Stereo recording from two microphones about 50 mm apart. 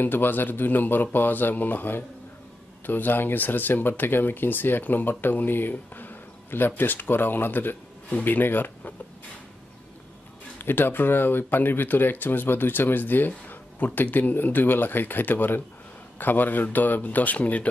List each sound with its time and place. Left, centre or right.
0.0 s speech: left
10.6 s speech: left